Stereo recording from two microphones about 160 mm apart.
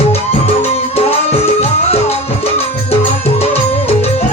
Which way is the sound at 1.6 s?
40° left (ahead or behind).